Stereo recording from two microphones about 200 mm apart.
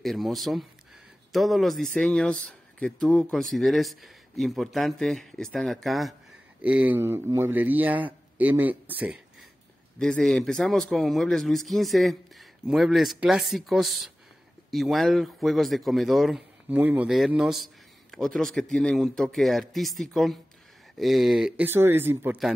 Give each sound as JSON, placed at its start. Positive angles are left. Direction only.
{"t": 0.0, "sound": "a man's voice", "side_deg": 0}
{"t": 9.9, "sound": "a man's voice", "side_deg": 0}